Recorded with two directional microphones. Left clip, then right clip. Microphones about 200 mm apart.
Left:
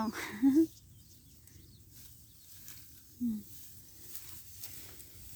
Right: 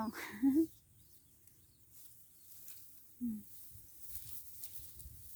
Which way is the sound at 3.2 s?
Centre (ahead or behind).